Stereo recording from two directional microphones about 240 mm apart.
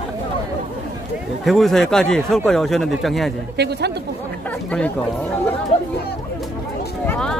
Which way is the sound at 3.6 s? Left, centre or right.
Right.